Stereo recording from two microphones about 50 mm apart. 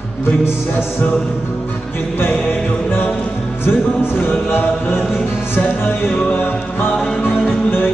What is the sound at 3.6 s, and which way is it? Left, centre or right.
Music, left.